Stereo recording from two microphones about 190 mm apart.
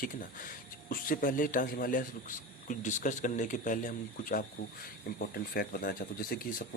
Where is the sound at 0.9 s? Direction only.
50° left (ahead or behind).